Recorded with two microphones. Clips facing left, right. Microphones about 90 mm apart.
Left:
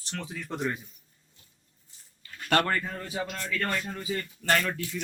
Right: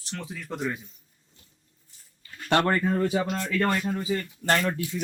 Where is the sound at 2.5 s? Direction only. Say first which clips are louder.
Right 4 dB; 25° right (ahead or behind).